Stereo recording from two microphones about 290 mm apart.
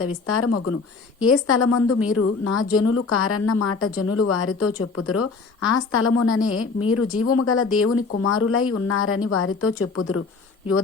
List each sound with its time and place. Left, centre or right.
0.0 s speech: left
5.9 s speech: left